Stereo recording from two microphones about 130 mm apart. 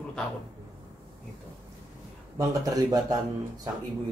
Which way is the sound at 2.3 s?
30° right (ahead or behind).